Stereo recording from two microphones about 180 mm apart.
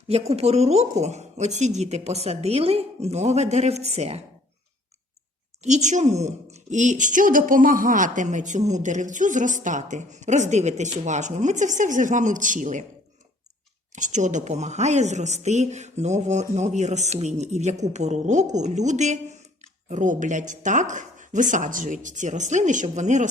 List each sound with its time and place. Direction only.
0.1 s a woman's voice: 35° right (ahead or behind)
5.6 s a woman's voice: 40° right (ahead or behind)
13.9 s a woman's voice: 40° right (ahead or behind)